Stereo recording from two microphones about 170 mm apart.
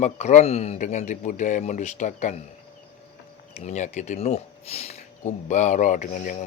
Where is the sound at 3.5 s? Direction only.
45° left (ahead or behind).